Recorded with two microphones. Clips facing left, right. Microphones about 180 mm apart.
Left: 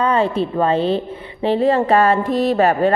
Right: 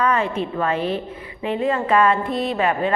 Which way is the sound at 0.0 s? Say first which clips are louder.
Left 4 dB; 30° left (ahead or behind).